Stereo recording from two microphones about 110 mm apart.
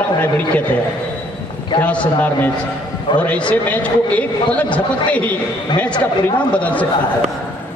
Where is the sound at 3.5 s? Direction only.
15° left (ahead or behind).